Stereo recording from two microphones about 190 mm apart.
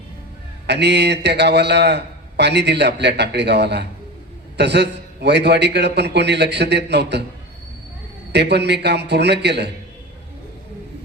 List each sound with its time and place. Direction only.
0.7 s a man's voice: 65° right (ahead or behind)
8.3 s a man's voice: 60° right (ahead or behind)